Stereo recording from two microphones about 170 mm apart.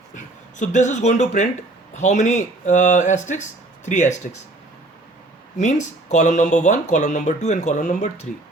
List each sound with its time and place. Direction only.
0.1 s speech: 45° left (ahead or behind)
5.5 s speech: 45° left (ahead or behind)